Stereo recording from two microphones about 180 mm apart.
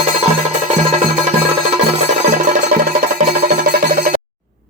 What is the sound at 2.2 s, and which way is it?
Music, 45° right (ahead or behind).